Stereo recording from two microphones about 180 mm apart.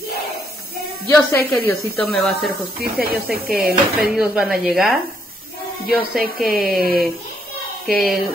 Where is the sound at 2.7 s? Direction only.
55° right (ahead or behind).